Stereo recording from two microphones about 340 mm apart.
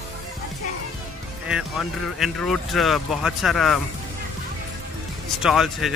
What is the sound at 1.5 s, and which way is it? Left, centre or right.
Speech, centre.